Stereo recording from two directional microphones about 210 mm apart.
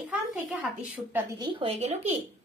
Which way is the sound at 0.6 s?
10° right (ahead or behind).